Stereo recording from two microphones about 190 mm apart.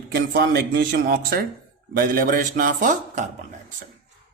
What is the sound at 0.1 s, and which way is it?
Speech, 55° right (ahead or behind).